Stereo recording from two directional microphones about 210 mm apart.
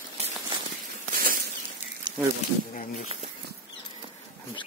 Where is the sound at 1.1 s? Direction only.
40° right (ahead or behind).